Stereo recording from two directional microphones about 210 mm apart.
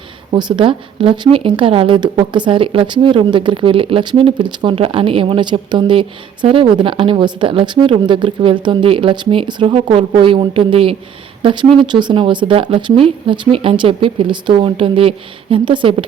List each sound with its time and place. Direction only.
0.3 s speech: 20° right (ahead or behind)